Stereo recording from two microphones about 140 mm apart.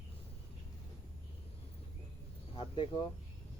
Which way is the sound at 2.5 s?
35° left (ahead or behind).